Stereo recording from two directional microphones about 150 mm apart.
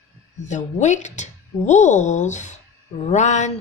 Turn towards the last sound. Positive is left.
turn(degrees=50)  # may be behind; listen again after turning